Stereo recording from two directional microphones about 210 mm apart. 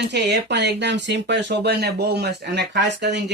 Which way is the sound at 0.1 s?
55° right (ahead or behind).